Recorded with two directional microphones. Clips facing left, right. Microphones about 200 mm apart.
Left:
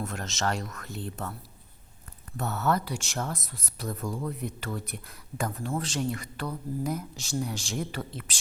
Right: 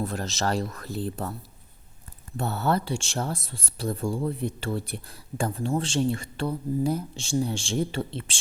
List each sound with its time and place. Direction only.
0.0 s speech: 35° right (ahead or behind)